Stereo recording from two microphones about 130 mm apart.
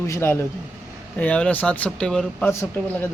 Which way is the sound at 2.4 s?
20° left (ahead or behind).